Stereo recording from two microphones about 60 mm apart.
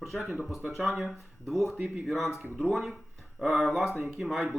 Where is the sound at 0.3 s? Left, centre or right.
Centre.